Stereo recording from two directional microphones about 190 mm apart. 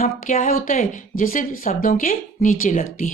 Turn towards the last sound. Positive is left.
turn(degrees=45)  # may be behind; listen again after turning